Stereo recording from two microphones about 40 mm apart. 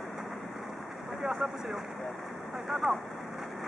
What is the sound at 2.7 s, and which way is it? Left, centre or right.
Vehicle, centre.